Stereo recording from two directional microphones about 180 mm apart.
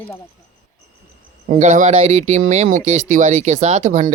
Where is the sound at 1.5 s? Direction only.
40° right (ahead or behind).